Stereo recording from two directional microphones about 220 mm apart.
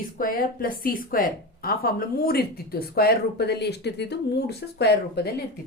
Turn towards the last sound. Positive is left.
turn(degrees=50)  # may be behind; listen again after turning